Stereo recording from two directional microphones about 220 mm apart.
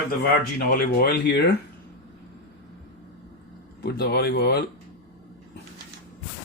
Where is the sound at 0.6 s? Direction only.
40° left (ahead or behind).